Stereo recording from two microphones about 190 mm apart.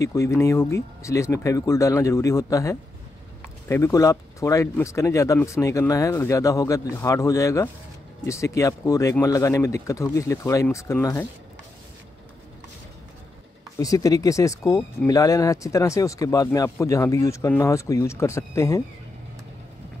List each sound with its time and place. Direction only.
0.0 s speech: 15° left (ahead or behind)
13.7 s speech: 15° left (ahead or behind)